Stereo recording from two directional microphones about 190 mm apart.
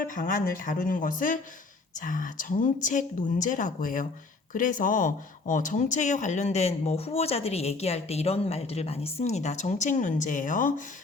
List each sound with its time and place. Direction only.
0.1 s speech: 45° left (ahead or behind)